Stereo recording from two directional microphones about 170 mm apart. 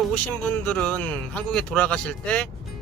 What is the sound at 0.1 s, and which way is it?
Speech, 10° left (ahead or behind).